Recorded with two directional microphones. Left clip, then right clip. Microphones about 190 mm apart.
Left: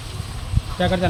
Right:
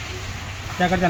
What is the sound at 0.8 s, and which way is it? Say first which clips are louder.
Speech: right 1 dB; 20° left (ahead or behind).